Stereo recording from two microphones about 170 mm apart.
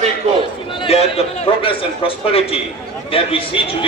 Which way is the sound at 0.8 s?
35° left (ahead or behind).